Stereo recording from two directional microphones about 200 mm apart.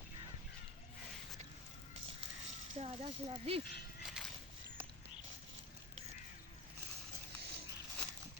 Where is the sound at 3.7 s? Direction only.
50° left (ahead or behind).